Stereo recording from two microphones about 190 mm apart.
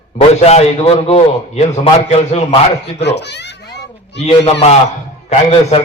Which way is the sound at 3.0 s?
65° left (ahead or behind).